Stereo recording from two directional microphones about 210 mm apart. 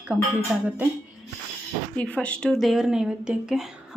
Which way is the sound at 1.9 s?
5° left (ahead or behind).